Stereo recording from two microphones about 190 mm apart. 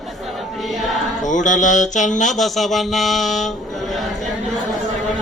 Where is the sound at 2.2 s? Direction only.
Centre (ahead or behind).